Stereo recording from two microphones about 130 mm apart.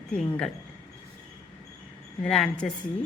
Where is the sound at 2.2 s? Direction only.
5° left (ahead or behind).